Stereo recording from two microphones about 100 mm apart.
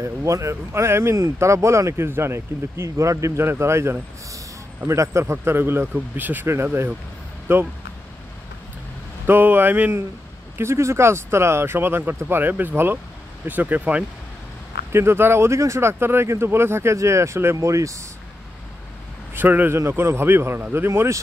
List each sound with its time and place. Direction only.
0.0 s speech: 30° right (ahead or behind)
9.2 s speech: 20° right (ahead or behind)
19.3 s speech: 20° right (ahead or behind)